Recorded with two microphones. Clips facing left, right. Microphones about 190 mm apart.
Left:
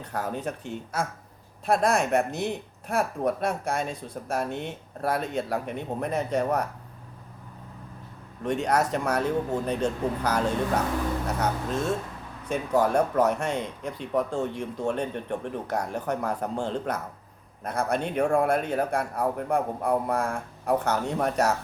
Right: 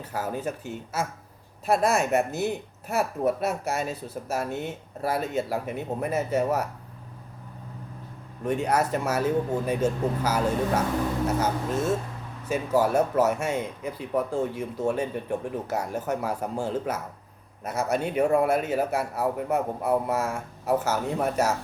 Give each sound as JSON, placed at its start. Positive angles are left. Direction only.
{"t": 0.0, "sound": "speech", "side_deg": -5}
{"t": 8.4, "sound": "speech", "side_deg": -5}